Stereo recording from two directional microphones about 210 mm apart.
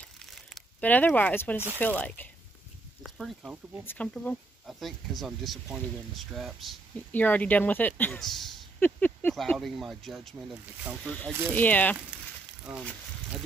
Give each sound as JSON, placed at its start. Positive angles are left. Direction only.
{"t": 0.5, "sound": "speech", "side_deg": 5}